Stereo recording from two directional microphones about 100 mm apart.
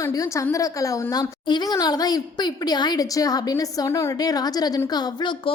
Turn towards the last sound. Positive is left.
turn(degrees=45)  # may be behind; listen again after turning